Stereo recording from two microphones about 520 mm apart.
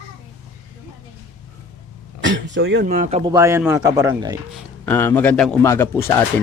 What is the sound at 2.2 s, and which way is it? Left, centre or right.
Speech, right.